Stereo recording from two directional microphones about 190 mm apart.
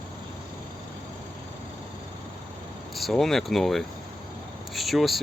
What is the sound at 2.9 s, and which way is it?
Speech, centre (ahead or behind).